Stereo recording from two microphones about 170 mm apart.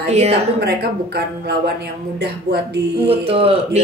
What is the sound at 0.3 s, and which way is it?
Speech, 70° right (ahead or behind).